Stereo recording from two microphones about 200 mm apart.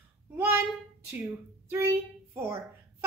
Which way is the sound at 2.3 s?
15° right (ahead or behind).